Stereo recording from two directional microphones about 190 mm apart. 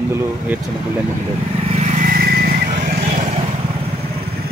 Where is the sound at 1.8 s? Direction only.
40° right (ahead or behind).